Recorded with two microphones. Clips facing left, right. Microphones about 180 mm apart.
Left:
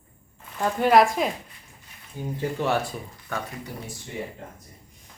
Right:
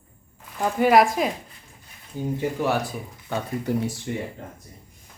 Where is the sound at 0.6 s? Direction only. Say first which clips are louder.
Right 1 dB; 5° right (ahead or behind).